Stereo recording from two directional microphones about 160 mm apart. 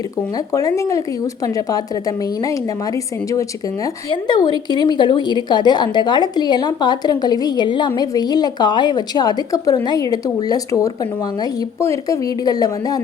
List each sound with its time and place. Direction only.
0.3 s a woman's voice: 20° left (ahead or behind)